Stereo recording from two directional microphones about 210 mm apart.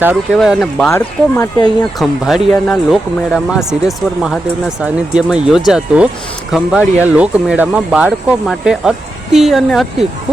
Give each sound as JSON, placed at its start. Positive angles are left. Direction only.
{"t": 0.3, "sound": "speech", "side_deg": 0}
{"t": 0.9, "sound": "speech", "side_deg": 15}
{"t": 2.0, "sound": "speech", "side_deg": 0}